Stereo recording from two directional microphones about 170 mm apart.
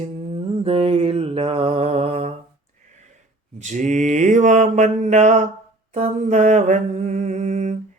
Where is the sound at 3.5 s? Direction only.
45° right (ahead or behind).